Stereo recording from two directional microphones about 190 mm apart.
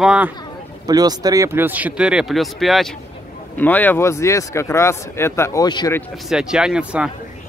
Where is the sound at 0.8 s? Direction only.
20° right (ahead or behind); by 5.9 s 20° left (ahead or behind).